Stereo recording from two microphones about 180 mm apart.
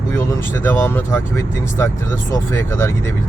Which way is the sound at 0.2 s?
15° left (ahead or behind).